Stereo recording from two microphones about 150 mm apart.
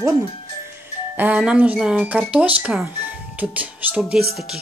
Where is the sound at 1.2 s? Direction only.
10° right (ahead or behind).